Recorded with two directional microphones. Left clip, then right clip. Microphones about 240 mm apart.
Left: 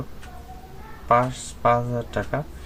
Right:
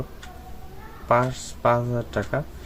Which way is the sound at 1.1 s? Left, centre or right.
Centre.